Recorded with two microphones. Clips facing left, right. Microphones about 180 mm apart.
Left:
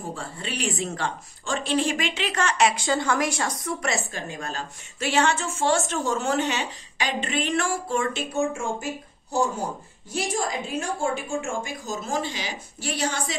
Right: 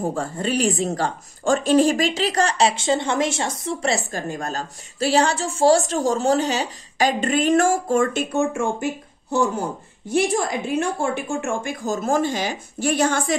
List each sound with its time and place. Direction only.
0.0 s speech: 45° right (ahead or behind); by 4.0 s 30° right (ahead or behind)
4.1 s a woman's voice: 45° right (ahead or behind)